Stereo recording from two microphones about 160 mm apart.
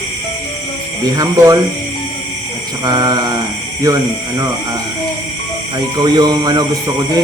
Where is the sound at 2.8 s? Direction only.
25° right (ahead or behind).